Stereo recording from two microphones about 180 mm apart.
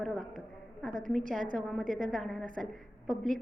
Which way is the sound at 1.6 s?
Centre (ahead or behind).